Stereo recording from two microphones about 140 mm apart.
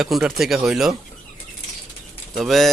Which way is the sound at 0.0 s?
Centre (ahead or behind).